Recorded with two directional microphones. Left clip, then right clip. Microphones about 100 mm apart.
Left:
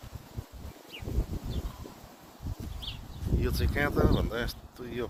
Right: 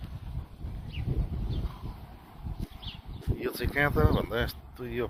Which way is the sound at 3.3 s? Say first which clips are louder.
Right 1 dB; 30° left (ahead or behind).